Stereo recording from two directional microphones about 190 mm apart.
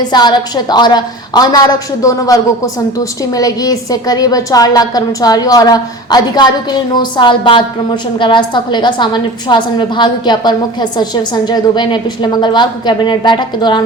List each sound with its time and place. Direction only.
0.1 s a woman's voice: 20° left (ahead or behind)